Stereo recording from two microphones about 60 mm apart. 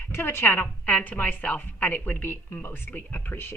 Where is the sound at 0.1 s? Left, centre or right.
Left.